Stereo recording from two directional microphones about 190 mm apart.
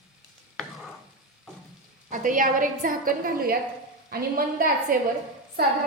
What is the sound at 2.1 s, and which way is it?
A woman's voice, 45° right (ahead or behind).